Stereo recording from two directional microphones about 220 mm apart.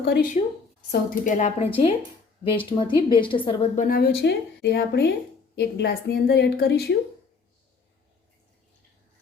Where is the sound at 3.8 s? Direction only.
40° left (ahead or behind).